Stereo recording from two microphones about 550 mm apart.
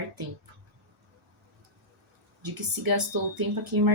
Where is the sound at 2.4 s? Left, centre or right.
Right.